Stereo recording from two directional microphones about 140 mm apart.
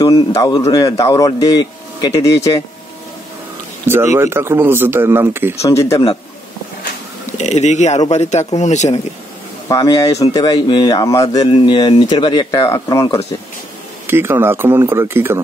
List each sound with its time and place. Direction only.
0.0 s a man's voice: 25° left (ahead or behind)
3.8 s speech: 20° right (ahead or behind)
5.6 s a man's voice: 20° left (ahead or behind)
7.3 s speech: 55° left (ahead or behind)
9.7 s a man's voice: 25° left (ahead or behind)
11.4 s speech: 35° left (ahead or behind)
14.0 s speech: 15° right (ahead or behind)